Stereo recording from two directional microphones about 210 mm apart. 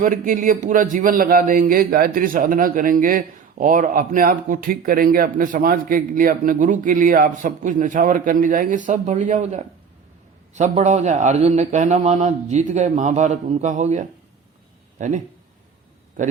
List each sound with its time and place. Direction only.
0.0 s a man's voice: 40° right (ahead or behind)